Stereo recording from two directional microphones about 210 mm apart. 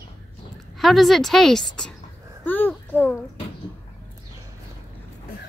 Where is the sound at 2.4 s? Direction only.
10° left (ahead or behind).